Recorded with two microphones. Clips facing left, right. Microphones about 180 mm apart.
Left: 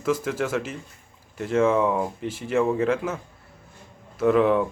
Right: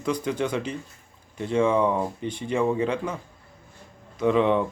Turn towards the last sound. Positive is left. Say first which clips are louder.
# left 2 dB
turn(degrees=5)  # may be behind; listen again after turning